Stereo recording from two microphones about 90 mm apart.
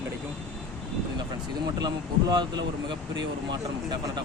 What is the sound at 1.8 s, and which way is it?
Speech, 50° right (ahead or behind).